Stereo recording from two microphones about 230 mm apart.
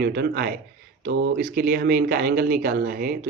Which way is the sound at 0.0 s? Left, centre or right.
Right.